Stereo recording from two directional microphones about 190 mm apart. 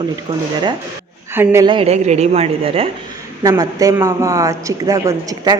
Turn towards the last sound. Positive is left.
turn(degrees=-20)  # may be behind; listen again after turning